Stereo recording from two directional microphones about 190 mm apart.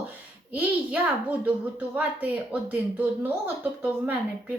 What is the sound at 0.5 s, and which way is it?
A woman's voice, 10° right (ahead or behind).